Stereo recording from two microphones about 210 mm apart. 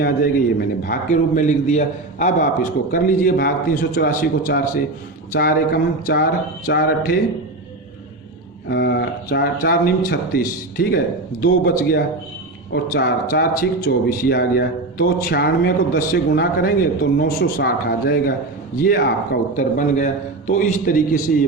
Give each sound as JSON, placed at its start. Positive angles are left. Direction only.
{"t": 0.9, "sound": "a man's voice", "side_deg": 35}
{"t": 8.7, "sound": "a man's voice", "side_deg": 50}